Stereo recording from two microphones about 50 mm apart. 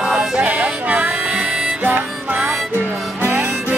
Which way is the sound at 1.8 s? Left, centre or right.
Right.